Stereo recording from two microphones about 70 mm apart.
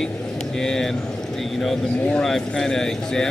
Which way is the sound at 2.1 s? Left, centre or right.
Centre.